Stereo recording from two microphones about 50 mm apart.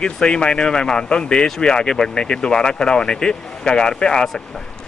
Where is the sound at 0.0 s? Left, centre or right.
Centre.